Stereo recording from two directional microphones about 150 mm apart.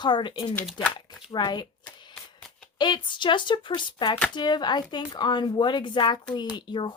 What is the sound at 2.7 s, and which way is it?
A woman's voice, 30° left (ahead or behind).